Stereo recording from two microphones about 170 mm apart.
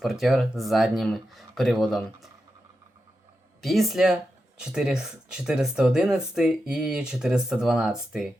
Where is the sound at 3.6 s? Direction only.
Centre (ahead or behind).